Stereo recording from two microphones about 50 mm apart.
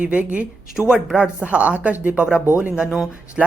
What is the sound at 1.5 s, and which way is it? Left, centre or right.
A woman's voice, right.